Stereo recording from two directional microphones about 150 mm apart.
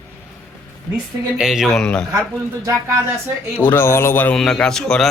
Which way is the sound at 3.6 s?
15° left (ahead or behind).